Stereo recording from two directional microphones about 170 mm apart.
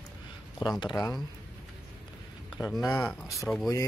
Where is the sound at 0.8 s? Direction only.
25° left (ahead or behind).